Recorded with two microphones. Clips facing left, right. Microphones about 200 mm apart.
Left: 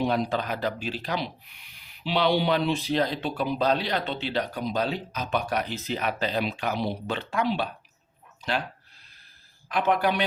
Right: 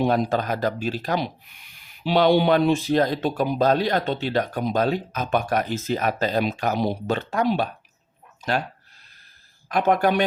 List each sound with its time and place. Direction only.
0.0 s speech: 45° right (ahead or behind)
9.6 s speech: 45° right (ahead or behind)